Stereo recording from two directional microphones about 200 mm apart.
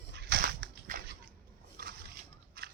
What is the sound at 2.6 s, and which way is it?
Biting, 50° right (ahead or behind).